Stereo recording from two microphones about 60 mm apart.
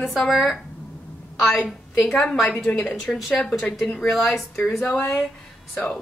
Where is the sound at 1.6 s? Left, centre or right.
Left.